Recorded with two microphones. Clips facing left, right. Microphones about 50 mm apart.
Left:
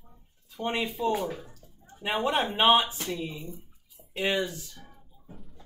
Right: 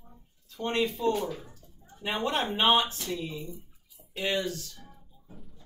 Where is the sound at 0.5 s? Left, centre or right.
Centre.